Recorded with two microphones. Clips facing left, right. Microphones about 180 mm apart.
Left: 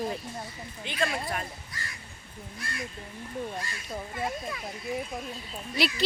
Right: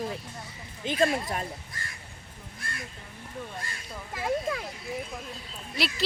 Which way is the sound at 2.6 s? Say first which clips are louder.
Left 2 dB; 50° right (ahead or behind).